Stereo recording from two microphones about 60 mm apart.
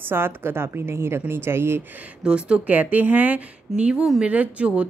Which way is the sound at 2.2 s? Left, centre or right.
Centre.